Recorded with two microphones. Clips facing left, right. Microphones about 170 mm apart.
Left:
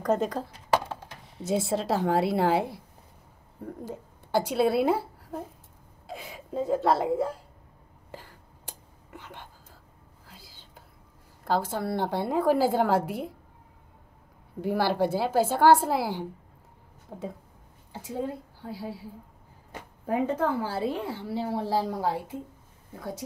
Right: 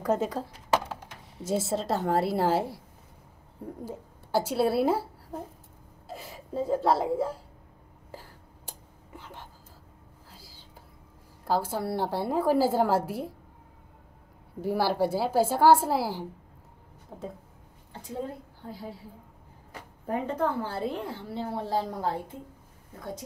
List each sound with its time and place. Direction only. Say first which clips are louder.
0.0 s a woman's voice: left 1 dB; 5° right (ahead or behind)
3.9 s a woman's voice: left 1 dB; 5° right (ahead or behind)
6.0 s a sound: left 1 dB; 5° right (ahead or behind)
6.8 s a woman's voice: even; 10° right (ahead or behind)
11.4 s a woman's voice: even; 10° right (ahead or behind)
14.6 s a woman's voice: left 1 dB; 5° right (ahead or behind)
17.1 s a woman's voice: left 2 dB; 10° left (ahead or behind)
20.1 s a woman's voice: left 2 dB; 10° left (ahead or behind)